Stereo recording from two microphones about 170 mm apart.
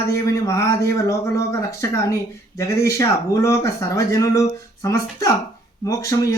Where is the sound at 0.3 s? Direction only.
20° left (ahead or behind).